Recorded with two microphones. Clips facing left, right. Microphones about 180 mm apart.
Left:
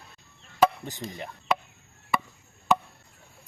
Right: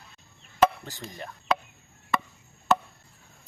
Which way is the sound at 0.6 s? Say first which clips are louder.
Even; 20° left (ahead or behind).